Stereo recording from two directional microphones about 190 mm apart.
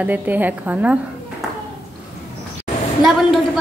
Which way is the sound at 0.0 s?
10° right (ahead or behind).